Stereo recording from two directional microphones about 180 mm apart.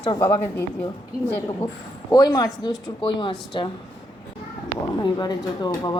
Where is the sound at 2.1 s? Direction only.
20° left (ahead or behind).